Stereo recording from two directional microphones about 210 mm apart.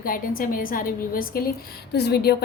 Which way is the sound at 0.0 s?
40° left (ahead or behind).